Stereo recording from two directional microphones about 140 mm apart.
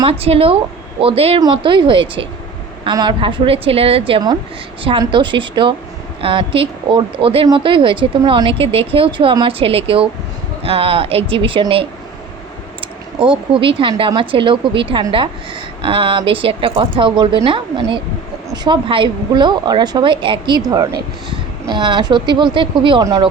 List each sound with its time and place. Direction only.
0.0 s a woman's voice: 45° right (ahead or behind)
13.1 s a woman's voice: 35° right (ahead or behind)